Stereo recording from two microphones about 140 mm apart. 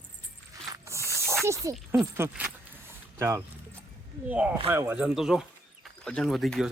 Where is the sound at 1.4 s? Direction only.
20° right (ahead or behind).